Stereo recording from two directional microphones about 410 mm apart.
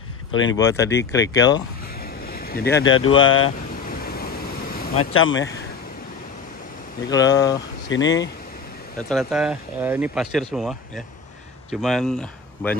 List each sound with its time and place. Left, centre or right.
0.3 s speech: left
0.6 s speech: centre
2.0 s vehicle: left
3.3 s speech: left
3.9 s vehicle: left
7.1 s speech: centre
9.1 s speech: centre